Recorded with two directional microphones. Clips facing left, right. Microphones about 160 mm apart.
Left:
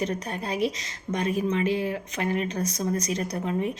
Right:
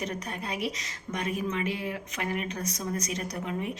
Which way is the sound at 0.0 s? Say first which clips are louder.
Left 5 dB; 35° left (ahead or behind).